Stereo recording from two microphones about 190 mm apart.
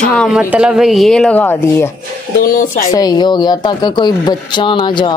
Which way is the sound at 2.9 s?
20° left (ahead or behind).